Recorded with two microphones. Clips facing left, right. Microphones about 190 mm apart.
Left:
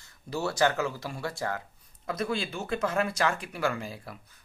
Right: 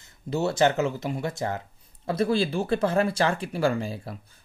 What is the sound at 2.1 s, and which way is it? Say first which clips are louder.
Speech: right 7 dB; 30° right (ahead or behind).